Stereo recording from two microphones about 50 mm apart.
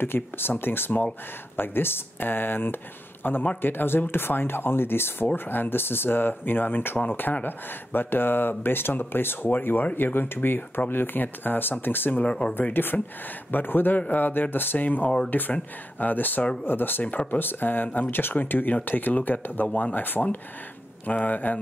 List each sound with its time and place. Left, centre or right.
0.0 s speech: left
12.2 s speech: left
12.7 s speech: left
17.0 s speech: left